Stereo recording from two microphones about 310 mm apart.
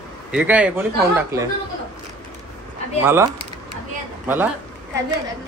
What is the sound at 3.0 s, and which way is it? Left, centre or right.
Speech, centre.